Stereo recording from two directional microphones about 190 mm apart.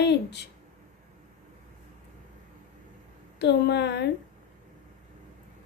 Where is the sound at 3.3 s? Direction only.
65° left (ahead or behind).